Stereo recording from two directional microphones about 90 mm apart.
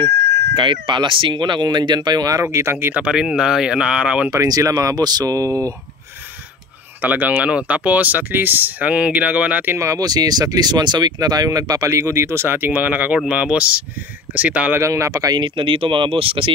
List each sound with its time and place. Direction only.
0.6 s speech: 65° right (ahead or behind); by 2.4 s 45° right (ahead or behind)
2.4 s speech: 30° right (ahead or behind); by 4.3 s 15° right (ahead or behind)
4.3 s speech: 40° right (ahead or behind)
7.0 s speech: 20° right (ahead or behind)
9.8 s speech: 40° right (ahead or behind); by 14.8 s 15° right (ahead or behind)
14.8 s speech: 35° right (ahead or behind)
15.4 s speech: 65° right (ahead or behind); by 16.5 s 85° right